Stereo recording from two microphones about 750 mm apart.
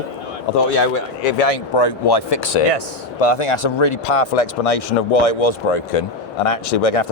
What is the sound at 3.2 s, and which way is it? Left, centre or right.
Speech, left.